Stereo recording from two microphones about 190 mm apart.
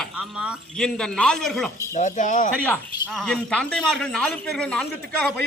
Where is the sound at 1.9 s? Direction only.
40° left (ahead or behind).